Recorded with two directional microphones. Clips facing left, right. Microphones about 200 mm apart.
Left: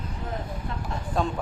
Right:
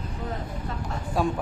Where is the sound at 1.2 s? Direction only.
5° right (ahead or behind).